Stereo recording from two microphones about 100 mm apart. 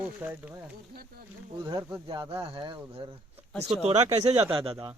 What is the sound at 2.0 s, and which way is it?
Speech, 50° right (ahead or behind).